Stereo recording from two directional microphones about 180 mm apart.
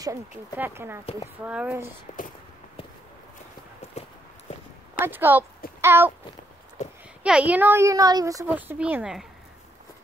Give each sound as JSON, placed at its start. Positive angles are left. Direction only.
{"t": 0.0, "sound": "a woman's voice", "side_deg": -15}
{"t": 2.1, "sound": "speech", "side_deg": 40}
{"t": 4.0, "sound": "clip-clop", "side_deg": 35}
{"t": 5.0, "sound": "a woman's voice", "side_deg": -10}
{"t": 5.8, "sound": "a sound", "side_deg": -15}
{"t": 7.2, "sound": "a woman's voice", "side_deg": -5}
{"t": 8.5, "sound": "a woman's voice", "side_deg": -10}